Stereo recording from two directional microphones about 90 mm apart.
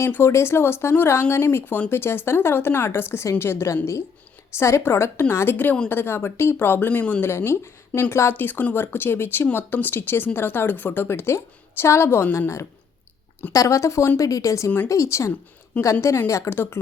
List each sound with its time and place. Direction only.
0.0 s speech: 25° left (ahead or behind)
7.3 s a woman's voice: 30° left (ahead or behind)